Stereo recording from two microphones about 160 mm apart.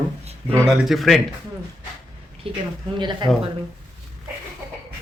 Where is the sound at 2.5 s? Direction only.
35° right (ahead or behind).